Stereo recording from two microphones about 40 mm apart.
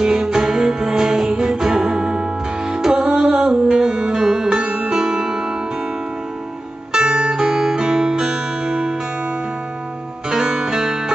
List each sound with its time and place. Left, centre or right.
0.0 s music: centre
6.9 s music: right
10.3 s music: centre